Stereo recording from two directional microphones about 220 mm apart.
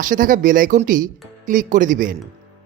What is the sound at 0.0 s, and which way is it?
Speech, 35° right (ahead or behind).